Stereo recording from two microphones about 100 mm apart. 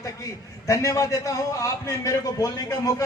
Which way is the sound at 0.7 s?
30° left (ahead or behind).